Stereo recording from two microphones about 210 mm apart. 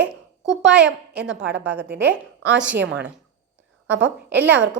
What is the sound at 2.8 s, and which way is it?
Speech, 55° right (ahead or behind).